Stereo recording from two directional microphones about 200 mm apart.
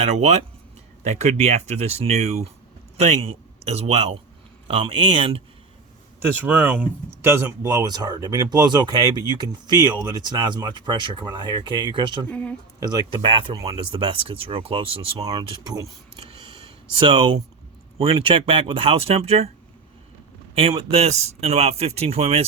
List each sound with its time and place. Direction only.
0.0 s speech: 30° right (ahead or behind)
3.6 s speech: 30° right (ahead or behind)
6.4 s speech: 10° right (ahead or behind)
12.3 s speech: 5° left (ahead or behind)
12.8 s speech: 25° right (ahead or behind)
17.0 s speech: 25° right (ahead or behind)
20.6 s speech: 30° right (ahead or behind)